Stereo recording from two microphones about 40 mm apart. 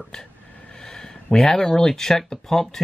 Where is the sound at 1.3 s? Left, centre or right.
Centre.